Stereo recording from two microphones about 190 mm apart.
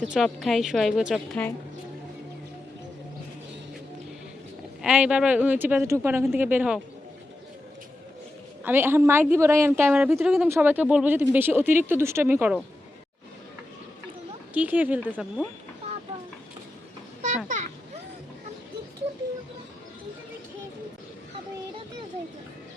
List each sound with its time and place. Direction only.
0.0 s a woman's voice: centre (ahead or behind)
4.8 s speech: 5° right (ahead or behind)
8.6 s speech: 10° right (ahead or behind)
14.5 s speech: 10° right (ahead or behind)
17.2 s a sound: 40° right (ahead or behind)